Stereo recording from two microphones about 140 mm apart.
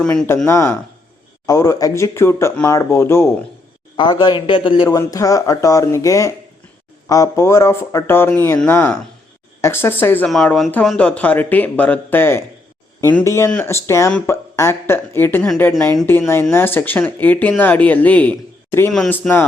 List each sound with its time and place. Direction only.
0.0 s speech: 5° left (ahead or behind)
0.4 s speech: 20° left (ahead or behind)
3.9 s a man's voice: 35° left (ahead or behind)
4.9 s speech: 25° left (ahead or behind)
10.2 s speech: 5° left (ahead or behind)
18.9 s speech: centre (ahead or behind)
19.1 s speech: 15° left (ahead or behind)